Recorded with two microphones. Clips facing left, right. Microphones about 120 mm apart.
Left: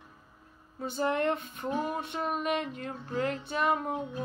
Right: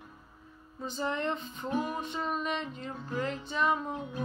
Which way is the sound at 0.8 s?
55° left (ahead or behind).